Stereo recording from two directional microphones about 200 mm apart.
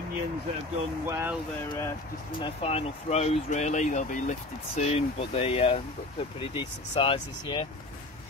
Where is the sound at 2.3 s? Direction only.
25° left (ahead or behind).